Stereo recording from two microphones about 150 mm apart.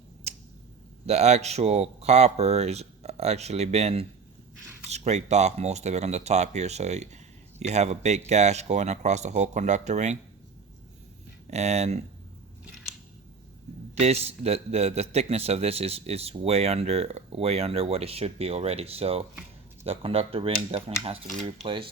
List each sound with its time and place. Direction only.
0.3 s a sound: 45° right (ahead or behind)
1.0 s a man's voice: 50° right (ahead or behind)
11.5 s a man's voice: 45° right (ahead or behind)
14.0 s a man's voice: 45° right (ahead or behind)